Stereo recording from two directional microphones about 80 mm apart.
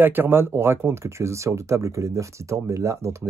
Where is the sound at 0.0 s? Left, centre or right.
Right.